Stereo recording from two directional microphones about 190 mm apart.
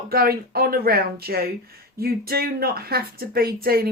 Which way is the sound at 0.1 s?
55° right (ahead or behind).